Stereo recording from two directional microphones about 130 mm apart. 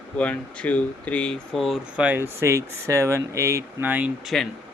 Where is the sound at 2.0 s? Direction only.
15° right (ahead or behind).